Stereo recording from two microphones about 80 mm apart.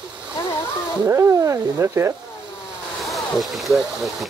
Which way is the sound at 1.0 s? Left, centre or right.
Right.